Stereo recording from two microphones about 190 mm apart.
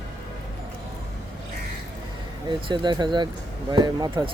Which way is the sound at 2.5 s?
25° right (ahead or behind).